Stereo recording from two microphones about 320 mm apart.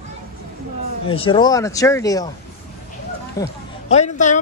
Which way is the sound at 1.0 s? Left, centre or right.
Centre.